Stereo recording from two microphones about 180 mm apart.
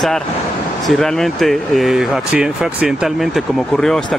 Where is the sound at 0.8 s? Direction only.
Centre (ahead or behind).